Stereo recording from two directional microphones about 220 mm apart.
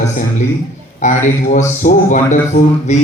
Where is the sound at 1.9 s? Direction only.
40° left (ahead or behind).